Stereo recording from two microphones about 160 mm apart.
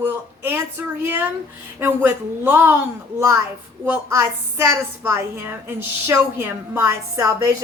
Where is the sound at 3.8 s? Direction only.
15° right (ahead or behind).